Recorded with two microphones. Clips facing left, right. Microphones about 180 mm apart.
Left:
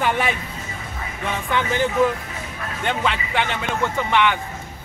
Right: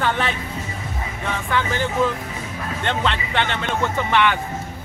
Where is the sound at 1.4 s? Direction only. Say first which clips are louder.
Left 2 dB; 20° left (ahead or behind).